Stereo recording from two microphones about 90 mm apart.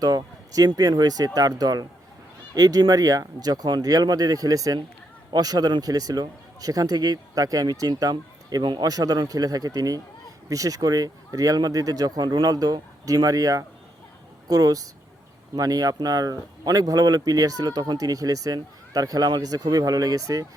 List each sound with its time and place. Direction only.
0.0 s speech: 45° right (ahead or behind)